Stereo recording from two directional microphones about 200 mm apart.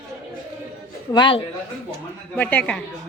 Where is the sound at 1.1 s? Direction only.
25° left (ahead or behind).